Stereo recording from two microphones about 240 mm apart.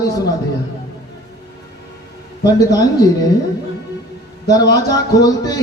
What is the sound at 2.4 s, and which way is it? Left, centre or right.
Speech, centre.